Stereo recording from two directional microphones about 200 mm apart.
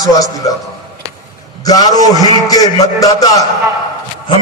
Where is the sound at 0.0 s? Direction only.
15° left (ahead or behind).